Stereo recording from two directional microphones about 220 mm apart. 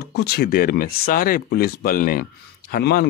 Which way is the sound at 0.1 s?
45° left (ahead or behind).